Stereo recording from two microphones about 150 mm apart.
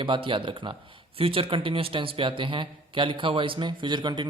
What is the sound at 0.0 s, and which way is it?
Speech, 35° right (ahead or behind).